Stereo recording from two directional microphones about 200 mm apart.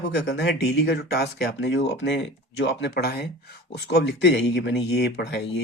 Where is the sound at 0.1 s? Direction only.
55° left (ahead or behind).